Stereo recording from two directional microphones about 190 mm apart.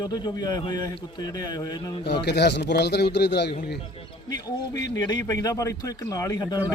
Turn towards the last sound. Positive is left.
turn(degrees=20)  # may be behind; listen again after turning